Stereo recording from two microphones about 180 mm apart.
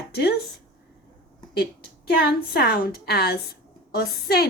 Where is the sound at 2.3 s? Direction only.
60° left (ahead or behind).